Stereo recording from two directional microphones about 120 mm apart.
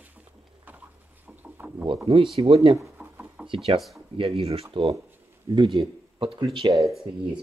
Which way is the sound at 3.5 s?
50° right (ahead or behind).